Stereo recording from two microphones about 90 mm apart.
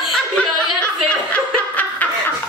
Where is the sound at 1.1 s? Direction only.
15° left (ahead or behind).